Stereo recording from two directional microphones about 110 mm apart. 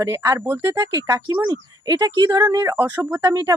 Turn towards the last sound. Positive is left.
turn(degrees=-35)  # may be behind; listen again after turning